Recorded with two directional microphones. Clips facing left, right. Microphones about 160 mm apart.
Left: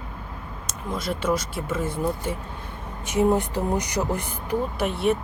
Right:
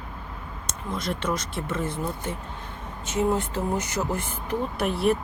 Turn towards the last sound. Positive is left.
turn(degrees=0)  # may be behind; listen again after turning